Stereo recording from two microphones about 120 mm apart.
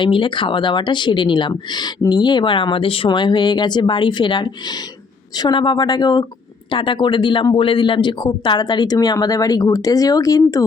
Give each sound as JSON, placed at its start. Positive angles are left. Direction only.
{"t": 0.0, "sound": "speech", "side_deg": 45}